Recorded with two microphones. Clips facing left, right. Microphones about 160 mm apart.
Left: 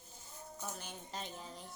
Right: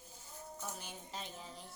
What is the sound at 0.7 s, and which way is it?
Speech, 5° right (ahead or behind).